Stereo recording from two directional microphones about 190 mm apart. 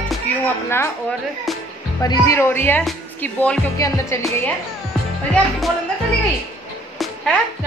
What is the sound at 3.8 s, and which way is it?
Speech, 20° left (ahead or behind).